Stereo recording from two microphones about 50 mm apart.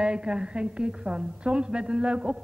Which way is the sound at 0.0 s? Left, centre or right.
Centre.